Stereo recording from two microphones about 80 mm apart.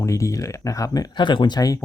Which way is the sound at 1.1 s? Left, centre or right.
Left.